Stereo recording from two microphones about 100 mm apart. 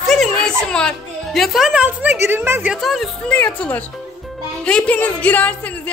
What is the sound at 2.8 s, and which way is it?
Speech, centre (ahead or behind).